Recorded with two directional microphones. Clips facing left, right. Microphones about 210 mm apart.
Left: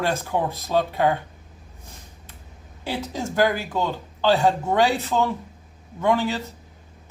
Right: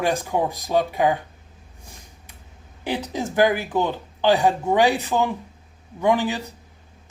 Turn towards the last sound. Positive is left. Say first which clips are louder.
# right 1 dB
turn(degrees=-15)  # may be behind; listen again after turning